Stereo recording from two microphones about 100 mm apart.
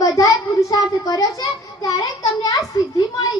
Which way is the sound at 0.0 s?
35° left (ahead or behind).